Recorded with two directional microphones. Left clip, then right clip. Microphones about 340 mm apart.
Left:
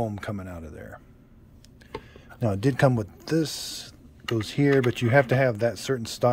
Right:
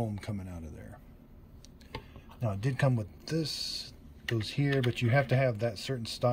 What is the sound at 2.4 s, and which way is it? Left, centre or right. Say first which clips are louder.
Speech: left 10 dB; centre.